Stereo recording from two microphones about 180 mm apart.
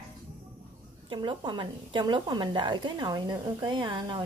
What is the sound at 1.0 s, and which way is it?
A woman's voice, 25° right (ahead or behind).